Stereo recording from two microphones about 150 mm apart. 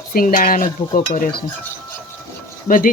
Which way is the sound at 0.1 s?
75° left (ahead or behind).